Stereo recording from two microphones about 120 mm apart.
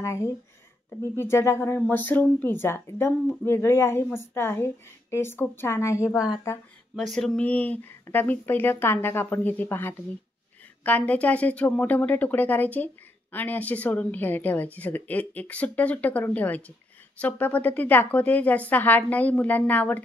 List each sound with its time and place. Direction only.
0.8 s speech: 20° left (ahead or behind)
7.1 s speech: 5° left (ahead or behind)